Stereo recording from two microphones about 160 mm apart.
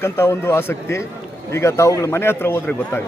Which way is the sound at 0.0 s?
15° left (ahead or behind).